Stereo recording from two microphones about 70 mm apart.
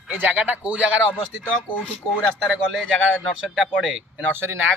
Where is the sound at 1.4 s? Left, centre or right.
Left.